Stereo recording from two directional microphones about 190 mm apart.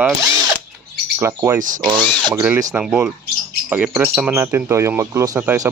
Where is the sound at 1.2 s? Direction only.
15° right (ahead or behind).